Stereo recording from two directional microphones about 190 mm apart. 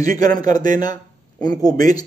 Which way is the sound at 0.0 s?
20° left (ahead or behind).